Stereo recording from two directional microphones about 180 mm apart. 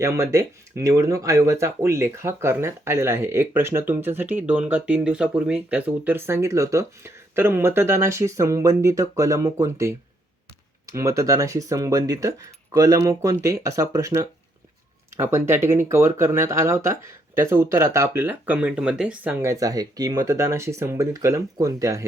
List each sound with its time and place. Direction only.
0.0 s speech: 15° right (ahead or behind)